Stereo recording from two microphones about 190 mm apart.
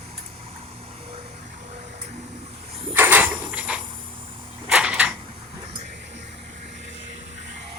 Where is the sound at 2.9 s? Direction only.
10° right (ahead or behind).